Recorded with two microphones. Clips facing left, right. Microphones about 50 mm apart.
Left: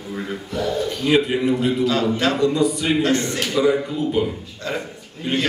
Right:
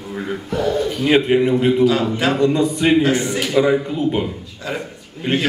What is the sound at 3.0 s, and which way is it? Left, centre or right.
Speech, centre.